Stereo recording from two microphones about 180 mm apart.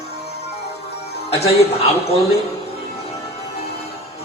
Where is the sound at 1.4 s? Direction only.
35° left (ahead or behind).